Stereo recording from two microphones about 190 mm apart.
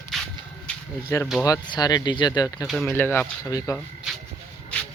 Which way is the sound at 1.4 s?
20° left (ahead or behind).